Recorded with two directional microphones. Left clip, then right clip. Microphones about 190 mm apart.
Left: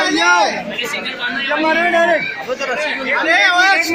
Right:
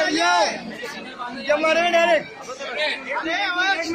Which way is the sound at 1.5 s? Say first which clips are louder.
Left 2 dB; 40° right (ahead or behind).